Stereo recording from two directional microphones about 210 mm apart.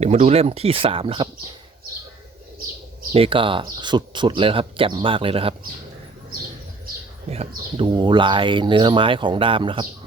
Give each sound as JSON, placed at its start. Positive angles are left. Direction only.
{"t": 0.0, "sound": "speech", "side_deg": -30}
{"t": 3.1, "sound": "speech", "side_deg": -25}
{"t": 7.3, "sound": "speech", "side_deg": -30}